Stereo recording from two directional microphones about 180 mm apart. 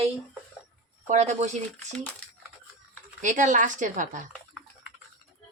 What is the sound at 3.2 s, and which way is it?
A woman's voice, 45° right (ahead or behind).